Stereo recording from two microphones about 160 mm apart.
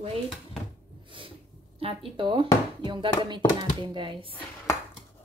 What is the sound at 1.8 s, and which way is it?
Speech, 35° right (ahead or behind).